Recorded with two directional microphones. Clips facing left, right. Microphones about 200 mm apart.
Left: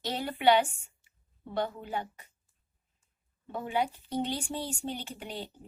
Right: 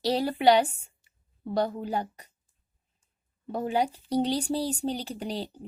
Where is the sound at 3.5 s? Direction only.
40° right (ahead or behind).